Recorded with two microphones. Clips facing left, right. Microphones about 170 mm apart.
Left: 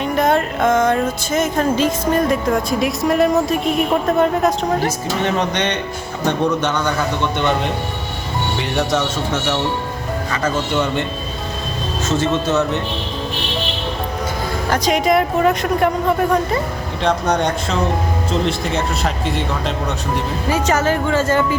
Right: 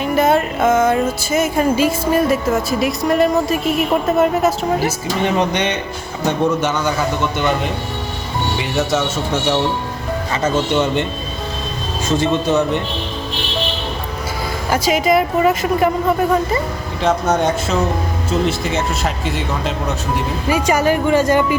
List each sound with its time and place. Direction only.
0.0 s music: 5° right (ahead or behind)
6.2 s a man's voice: 5° right (ahead or behind)
10.3 s speech: 20° right (ahead or behind)
12.0 s a man's voice: 15° right (ahead or behind)
14.7 s music: 5° right (ahead or behind)
20.1 s a man's voice: 10° right (ahead or behind)